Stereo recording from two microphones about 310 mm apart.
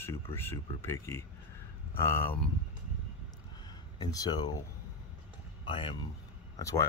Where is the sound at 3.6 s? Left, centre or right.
Centre.